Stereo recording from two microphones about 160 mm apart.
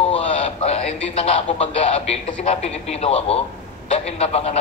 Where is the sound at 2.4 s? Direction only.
40° left (ahead or behind).